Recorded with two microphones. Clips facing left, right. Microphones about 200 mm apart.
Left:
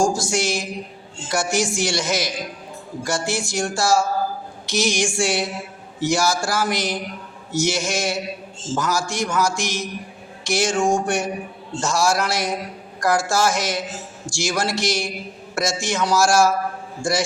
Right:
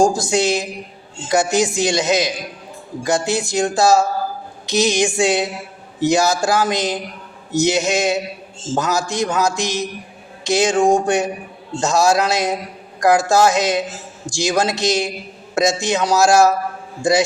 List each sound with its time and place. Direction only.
0.1 s a man's voice: 20° right (ahead or behind)